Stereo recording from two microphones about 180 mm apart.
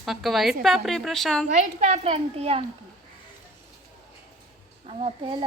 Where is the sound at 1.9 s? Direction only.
35° right (ahead or behind).